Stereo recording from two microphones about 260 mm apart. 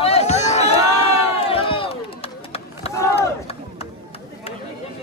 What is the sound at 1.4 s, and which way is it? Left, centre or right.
Crowd, left.